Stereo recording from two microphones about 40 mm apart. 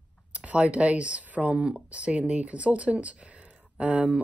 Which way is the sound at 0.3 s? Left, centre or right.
Right.